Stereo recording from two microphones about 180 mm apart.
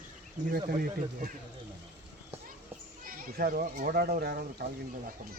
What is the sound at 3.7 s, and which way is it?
Speech, 55° right (ahead or behind).